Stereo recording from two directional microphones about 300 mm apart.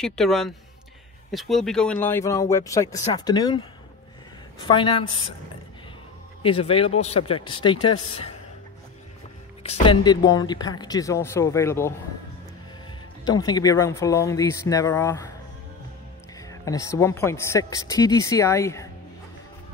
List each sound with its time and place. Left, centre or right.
0.0 s a woman's voice: centre
4.6 s a woman's voice: centre
6.4 s a woman's voice: centre
9.6 s a woman's voice: centre
13.2 s a woman's voice: centre
16.3 s a woman's voice: centre